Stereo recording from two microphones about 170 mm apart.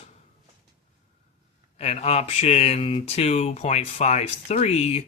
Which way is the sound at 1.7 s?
40° left (ahead or behind).